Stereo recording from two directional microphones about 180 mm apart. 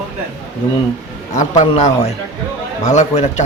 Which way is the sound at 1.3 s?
40° left (ahead or behind).